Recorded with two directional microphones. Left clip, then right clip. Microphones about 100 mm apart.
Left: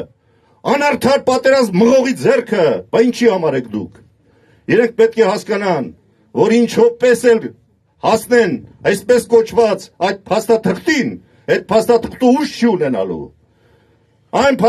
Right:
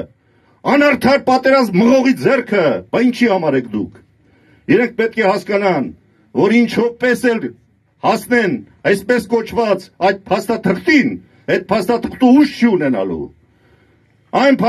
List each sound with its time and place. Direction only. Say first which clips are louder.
0.6 s speech: right 2 dB; 45° left (ahead or behind)